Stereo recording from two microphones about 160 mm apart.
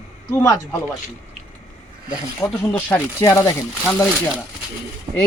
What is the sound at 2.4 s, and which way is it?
Speech, 20° left (ahead or behind).